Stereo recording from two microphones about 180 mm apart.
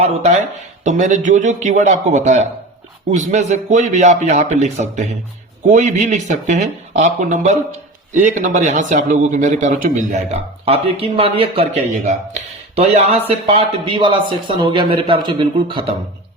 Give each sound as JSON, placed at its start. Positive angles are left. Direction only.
{"t": 0.9, "sound": "speech", "side_deg": -45}